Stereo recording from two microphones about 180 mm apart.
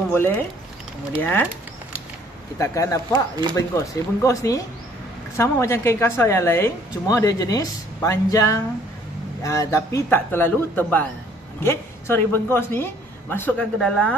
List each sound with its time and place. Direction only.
0.1 s speech: 15° left (ahead or behind)
2.6 s a woman's voice: 15° left (ahead or behind)